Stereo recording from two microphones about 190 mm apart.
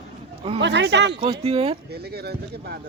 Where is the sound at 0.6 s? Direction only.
65° right (ahead or behind).